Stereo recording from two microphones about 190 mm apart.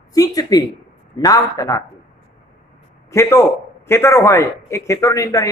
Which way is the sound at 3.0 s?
15° left (ahead or behind).